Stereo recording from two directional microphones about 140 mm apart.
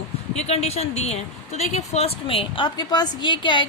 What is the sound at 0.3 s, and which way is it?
A woman's voice, 50° left (ahead or behind).